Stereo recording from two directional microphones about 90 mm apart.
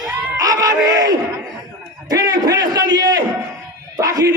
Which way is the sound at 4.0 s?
40° right (ahead or behind).